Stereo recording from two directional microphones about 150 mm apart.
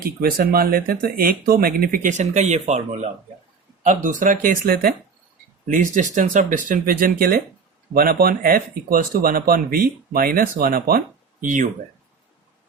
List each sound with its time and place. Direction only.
0.0 s speech: 80° right
5.7 s speech: 60° right (ahead or behind)